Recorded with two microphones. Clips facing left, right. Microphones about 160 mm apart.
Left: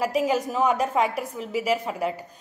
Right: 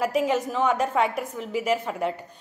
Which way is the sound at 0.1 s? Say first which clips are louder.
Even; 35° left (ahead or behind).